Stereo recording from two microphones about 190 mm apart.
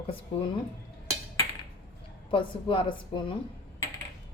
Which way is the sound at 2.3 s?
30° left (ahead or behind).